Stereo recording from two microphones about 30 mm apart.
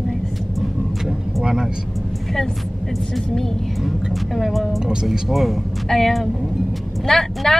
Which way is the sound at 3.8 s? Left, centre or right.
Centre.